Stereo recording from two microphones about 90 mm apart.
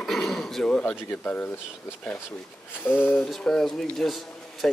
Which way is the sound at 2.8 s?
30° left (ahead or behind).